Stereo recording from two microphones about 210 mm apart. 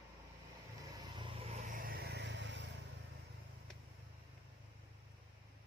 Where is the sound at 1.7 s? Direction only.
45° right (ahead or behind); by 2.6 s 60° right (ahead or behind).